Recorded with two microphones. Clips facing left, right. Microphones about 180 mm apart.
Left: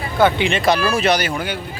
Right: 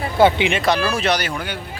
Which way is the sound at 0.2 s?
20° right (ahead or behind).